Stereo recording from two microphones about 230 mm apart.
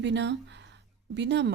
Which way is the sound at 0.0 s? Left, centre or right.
Right.